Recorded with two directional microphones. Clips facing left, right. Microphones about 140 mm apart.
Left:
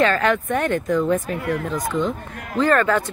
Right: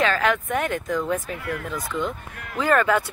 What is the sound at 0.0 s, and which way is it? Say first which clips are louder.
Speech: left 3 dB; centre (ahead or behind).